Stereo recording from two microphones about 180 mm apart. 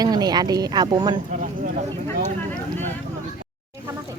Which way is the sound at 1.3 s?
45° right (ahead or behind).